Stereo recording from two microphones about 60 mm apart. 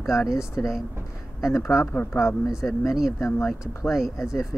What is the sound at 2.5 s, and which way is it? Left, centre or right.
Speech, centre.